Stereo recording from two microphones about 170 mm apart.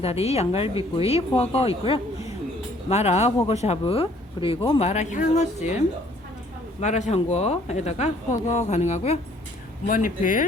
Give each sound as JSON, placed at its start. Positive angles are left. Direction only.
{"t": 0.0, "sound": "speech", "side_deg": 35}
{"t": 4.9, "sound": "a woman's voice", "side_deg": 45}
{"t": 6.8, "sound": "a woman's voice", "side_deg": 45}